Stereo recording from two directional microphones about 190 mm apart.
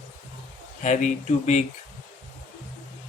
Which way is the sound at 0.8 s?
40° left (ahead or behind).